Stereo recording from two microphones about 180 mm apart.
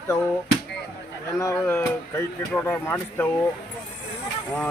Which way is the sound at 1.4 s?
15° left (ahead or behind).